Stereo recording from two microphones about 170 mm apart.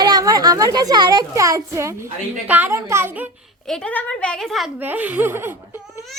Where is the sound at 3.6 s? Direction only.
5° left (ahead or behind).